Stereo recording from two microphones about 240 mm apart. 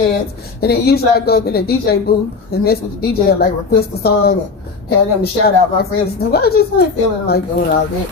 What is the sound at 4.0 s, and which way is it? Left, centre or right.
Speech, left.